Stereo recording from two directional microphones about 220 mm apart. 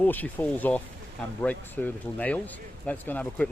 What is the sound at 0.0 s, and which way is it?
Speech, 10° left (ahead or behind).